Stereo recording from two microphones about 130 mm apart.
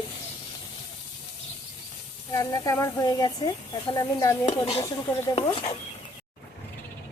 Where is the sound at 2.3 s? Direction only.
25° left (ahead or behind).